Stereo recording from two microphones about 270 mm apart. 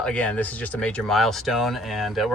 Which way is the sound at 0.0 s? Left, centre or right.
Centre.